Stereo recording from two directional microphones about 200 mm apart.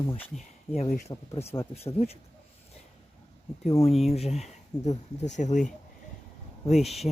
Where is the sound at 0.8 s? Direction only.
35° left (ahead or behind).